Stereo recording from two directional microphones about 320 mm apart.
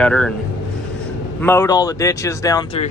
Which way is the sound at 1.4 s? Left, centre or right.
Centre.